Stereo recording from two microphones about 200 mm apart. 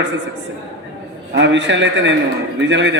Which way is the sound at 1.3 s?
60° right (ahead or behind).